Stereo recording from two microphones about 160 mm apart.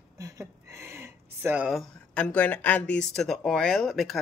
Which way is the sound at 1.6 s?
5° left (ahead or behind).